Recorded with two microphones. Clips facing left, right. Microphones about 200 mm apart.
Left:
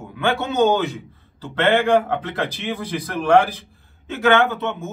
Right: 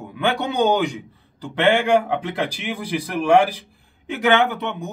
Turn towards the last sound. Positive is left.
turn(degrees=-15)  # may be behind; listen again after turning